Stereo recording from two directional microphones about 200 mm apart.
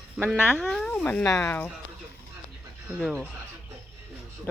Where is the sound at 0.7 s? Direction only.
5° left (ahead or behind).